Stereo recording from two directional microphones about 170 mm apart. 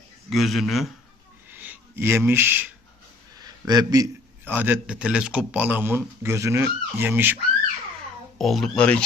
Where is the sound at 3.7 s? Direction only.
25° right (ahead or behind).